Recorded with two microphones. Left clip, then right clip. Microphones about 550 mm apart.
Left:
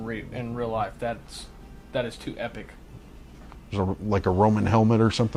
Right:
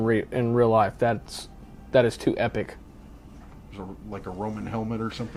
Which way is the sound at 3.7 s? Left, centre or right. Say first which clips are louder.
Left 12 dB; left.